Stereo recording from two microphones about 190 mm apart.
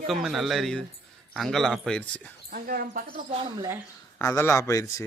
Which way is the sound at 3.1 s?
30° right (ahead or behind).